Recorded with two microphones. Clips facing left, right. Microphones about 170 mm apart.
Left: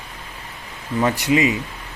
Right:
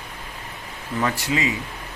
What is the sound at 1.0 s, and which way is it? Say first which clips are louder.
Speech: left 6 dB; 20° left (ahead or behind).